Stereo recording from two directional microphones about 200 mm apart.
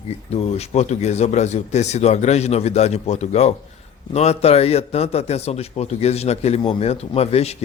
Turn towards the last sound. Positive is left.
turn(degrees=30)  # may be behind; listen again after turning